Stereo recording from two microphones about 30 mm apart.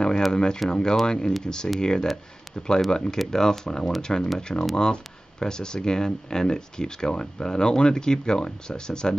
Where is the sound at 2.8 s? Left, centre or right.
Left.